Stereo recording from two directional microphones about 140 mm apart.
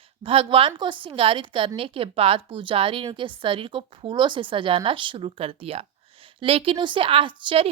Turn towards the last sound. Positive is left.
turn(degrees=-35)  # may be behind; listen again after turning